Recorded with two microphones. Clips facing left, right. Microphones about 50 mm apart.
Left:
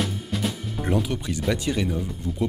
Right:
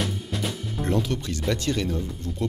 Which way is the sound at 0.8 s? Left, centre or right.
Centre.